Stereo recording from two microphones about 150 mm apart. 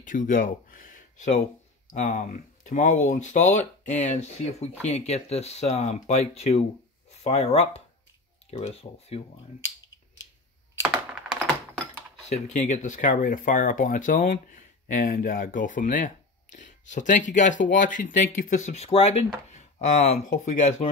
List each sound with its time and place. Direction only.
0.0 s speech: 60° left (ahead or behind); by 9.2 s 45° left (ahead or behind)
10.9 s computer keyboard: 5° right (ahead or behind)
12.3 s speech: 50° left (ahead or behind)
20.2 s speech: 55° left (ahead or behind)